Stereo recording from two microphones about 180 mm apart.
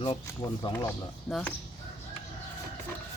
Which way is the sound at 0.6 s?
15° left (ahead or behind).